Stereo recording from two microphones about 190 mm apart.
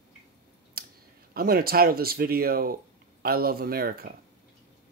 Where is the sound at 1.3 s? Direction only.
50° right (ahead or behind).